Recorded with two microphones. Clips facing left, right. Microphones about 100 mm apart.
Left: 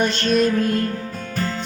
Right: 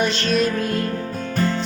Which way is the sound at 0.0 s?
45° left (ahead or behind).